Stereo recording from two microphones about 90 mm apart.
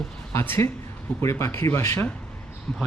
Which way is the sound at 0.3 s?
30° left (ahead or behind).